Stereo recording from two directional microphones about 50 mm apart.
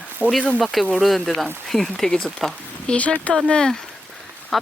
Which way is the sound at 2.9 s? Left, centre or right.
Left.